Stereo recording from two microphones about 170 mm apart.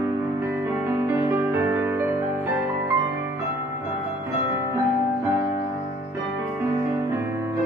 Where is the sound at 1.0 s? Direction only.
15° right (ahead or behind).